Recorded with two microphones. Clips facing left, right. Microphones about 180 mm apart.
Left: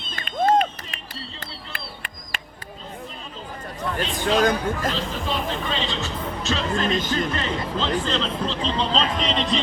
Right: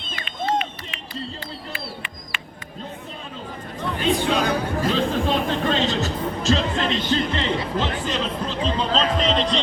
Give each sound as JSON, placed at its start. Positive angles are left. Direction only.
{"t": 0.2, "sound": "a sound", "side_deg": 45}
{"t": 1.7, "sound": "bird", "side_deg": 40}
{"t": 4.2, "sound": "speech", "side_deg": 45}
{"t": 4.9, "sound": "speech", "side_deg": -50}
{"t": 6.7, "sound": "speech", "side_deg": 45}
{"t": 7.3, "sound": "speech", "side_deg": -15}